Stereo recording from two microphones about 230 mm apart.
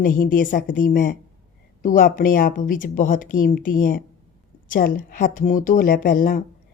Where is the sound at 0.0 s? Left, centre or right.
Left.